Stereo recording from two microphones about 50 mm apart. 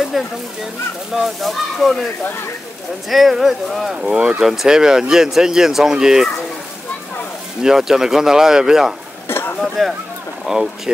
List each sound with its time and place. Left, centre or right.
0.1 s speech: centre
3.1 s speech: centre
3.9 s speech: centre
7.6 s speech: centre
9.3 s a sound: left
9.8 s speech: centre
10.4 s speech: centre